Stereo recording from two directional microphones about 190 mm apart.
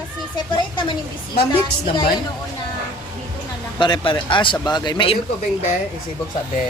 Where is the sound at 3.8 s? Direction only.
25° left (ahead or behind).